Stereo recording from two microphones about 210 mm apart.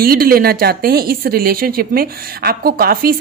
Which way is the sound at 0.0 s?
45° right (ahead or behind).